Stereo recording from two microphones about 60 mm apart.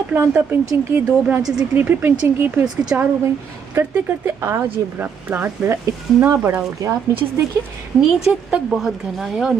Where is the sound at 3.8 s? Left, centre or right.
Right.